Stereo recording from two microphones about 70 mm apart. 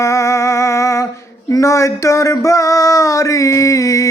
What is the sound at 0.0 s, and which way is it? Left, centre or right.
Music, left.